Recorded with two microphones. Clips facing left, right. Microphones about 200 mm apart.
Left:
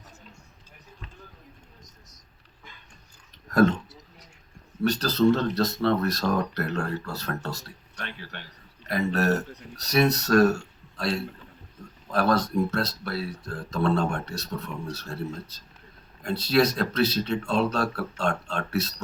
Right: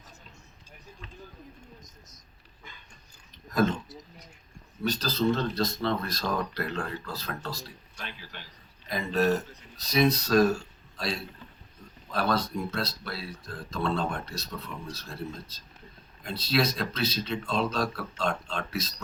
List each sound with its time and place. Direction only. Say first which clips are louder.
3.5 s speech: left 5 dB; 75° left (ahead or behind)
4.8 s speech: left 6 dB; 70° left (ahead or behind)
12.1 s speech: left 5 dB; 75° left (ahead or behind)